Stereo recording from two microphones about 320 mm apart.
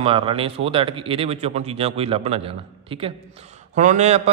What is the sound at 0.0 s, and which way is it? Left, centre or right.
A man's voice, centre.